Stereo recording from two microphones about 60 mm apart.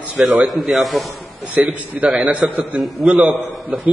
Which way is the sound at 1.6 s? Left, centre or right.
Centre.